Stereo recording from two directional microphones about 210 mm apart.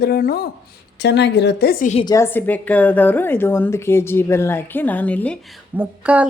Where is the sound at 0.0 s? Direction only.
45° left (ahead or behind).